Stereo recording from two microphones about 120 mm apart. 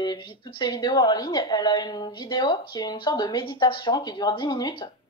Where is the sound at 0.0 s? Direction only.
35° left (ahead or behind).